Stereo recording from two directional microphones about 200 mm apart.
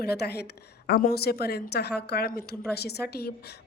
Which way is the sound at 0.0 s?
55° left (ahead or behind).